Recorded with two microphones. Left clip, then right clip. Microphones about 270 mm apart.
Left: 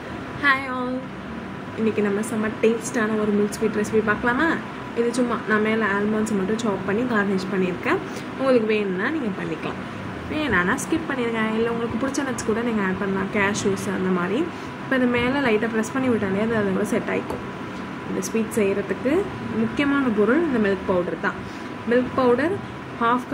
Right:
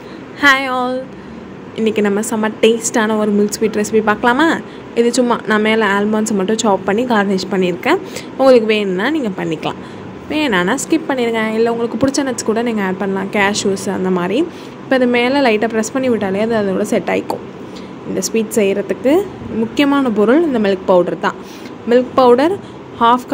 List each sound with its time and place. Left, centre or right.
0.4 s a woman's voice: right
2.0 s a woman's voice: right
10.3 s a woman's voice: right
18.3 s a woman's voice: right
21.8 s a woman's voice: right